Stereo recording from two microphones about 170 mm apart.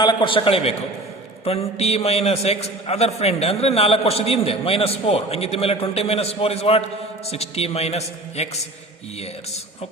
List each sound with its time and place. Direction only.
0.0 s a man's voice: 25° left (ahead or behind)